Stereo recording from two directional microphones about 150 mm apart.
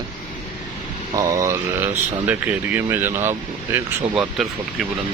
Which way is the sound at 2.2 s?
10° right (ahead or behind).